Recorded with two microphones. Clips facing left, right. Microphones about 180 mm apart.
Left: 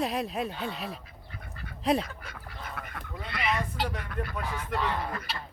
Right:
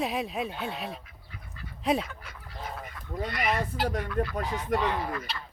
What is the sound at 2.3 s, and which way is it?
Goose, 65° left (ahead or behind).